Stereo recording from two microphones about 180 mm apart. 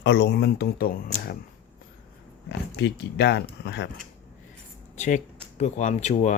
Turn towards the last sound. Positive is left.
turn(degrees=40)  # may be behind; listen again after turning